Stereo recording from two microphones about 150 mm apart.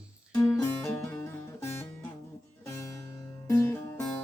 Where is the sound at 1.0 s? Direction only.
15° left (ahead or behind).